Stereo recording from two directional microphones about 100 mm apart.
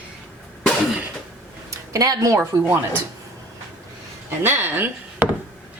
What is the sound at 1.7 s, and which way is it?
Speech, 35° right (ahead or behind).